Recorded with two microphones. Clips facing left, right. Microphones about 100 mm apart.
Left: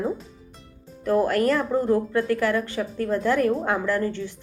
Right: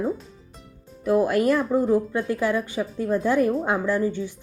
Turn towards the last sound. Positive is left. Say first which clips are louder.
# right 1 dB
turn(degrees=-15)  # may be behind; listen again after turning